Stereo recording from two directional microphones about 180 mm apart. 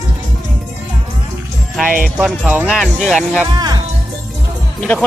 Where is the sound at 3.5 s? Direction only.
20° right (ahead or behind).